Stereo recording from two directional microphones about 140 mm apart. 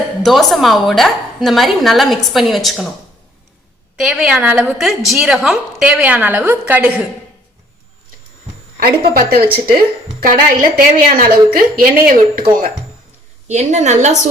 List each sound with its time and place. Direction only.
0.2 s a woman's voice: centre (ahead or behind)
3.9 s a woman's voice: 5° right (ahead or behind)
8.8 s a woman's voice: 90° right
13.5 s a woman's voice: 55° right (ahead or behind)